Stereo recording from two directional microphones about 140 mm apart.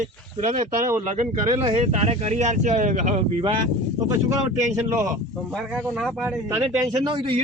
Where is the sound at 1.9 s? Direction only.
55° right (ahead or behind).